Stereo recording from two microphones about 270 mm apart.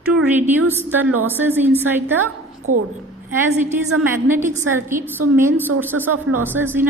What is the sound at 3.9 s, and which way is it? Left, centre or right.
A woman's voice, centre.